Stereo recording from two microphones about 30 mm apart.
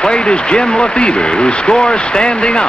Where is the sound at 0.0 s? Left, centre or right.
Left.